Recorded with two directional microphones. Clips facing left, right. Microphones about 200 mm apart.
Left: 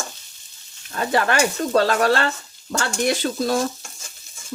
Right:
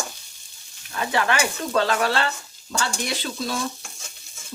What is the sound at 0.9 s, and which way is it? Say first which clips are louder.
Stir: left 3 dB; 40° left (ahead or behind).